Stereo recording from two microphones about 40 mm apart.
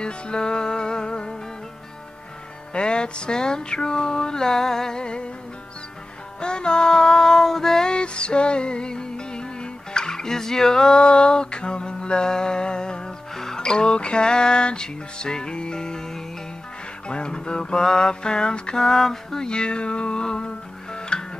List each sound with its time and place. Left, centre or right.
0.0 s music: left
2.7 s music: left
6.4 s music: left
17.1 s mantra: left